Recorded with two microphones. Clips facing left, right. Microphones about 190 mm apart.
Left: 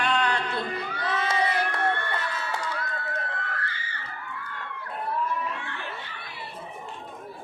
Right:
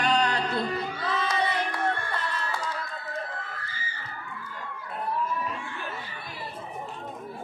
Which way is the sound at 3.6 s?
65° left (ahead or behind).